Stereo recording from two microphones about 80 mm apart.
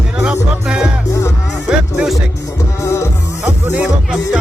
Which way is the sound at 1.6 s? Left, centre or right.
Centre.